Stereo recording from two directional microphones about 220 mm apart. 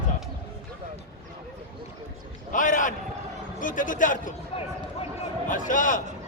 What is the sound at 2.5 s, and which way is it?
Speech, 35° left (ahead or behind).